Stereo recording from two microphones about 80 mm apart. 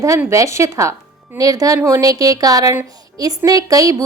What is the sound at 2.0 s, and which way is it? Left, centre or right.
A woman's voice, right.